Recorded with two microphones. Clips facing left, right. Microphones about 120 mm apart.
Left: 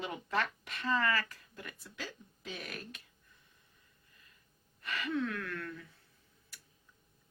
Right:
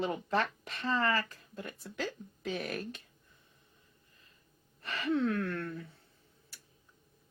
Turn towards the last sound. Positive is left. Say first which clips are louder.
# right 5 dB
turn(degrees=-35)  # may be behind; listen again after turning